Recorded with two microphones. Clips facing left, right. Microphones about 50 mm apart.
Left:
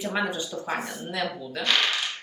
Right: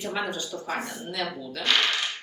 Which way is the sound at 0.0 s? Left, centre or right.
Centre.